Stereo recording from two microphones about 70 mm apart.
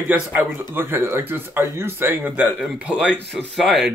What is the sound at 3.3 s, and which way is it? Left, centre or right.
Speech, centre.